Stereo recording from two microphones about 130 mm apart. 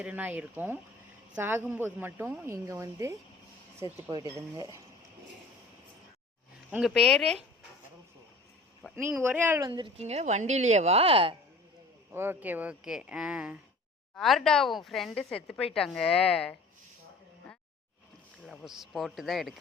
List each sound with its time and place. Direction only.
0.0 s a woman's voice: 10° right (ahead or behind)
4.4 s speech: 25° right (ahead or behind)
6.7 s speech: 10° right (ahead or behind)
6.9 s a woman's voice: 5° left (ahead or behind)
9.0 s a woman's voice: 15° right (ahead or behind)
9.6 s speech: 30° right (ahead or behind)
9.8 s a woman's voice: 55° right (ahead or behind)
12.1 s a woman's voice: 15° right (ahead or behind); by 16.6 s 10° left (ahead or behind)
18.4 s a woman's voice: centre (ahead or behind)